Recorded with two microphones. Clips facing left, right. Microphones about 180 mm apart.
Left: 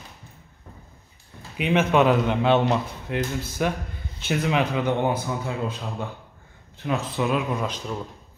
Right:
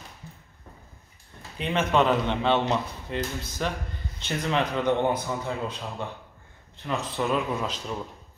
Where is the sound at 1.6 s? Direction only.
10° left (ahead or behind).